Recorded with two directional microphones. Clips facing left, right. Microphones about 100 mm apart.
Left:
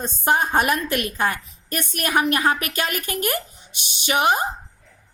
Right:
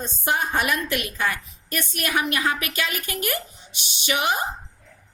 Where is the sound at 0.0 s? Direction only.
45° left (ahead or behind).